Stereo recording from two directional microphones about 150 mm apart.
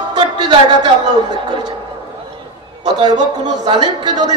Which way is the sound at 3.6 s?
30° right (ahead or behind).